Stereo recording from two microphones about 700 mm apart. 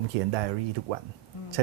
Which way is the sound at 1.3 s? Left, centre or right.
Left.